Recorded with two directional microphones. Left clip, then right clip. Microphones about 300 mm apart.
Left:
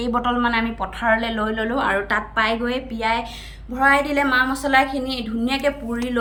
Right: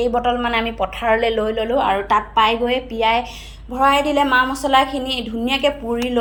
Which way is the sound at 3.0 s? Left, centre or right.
Left.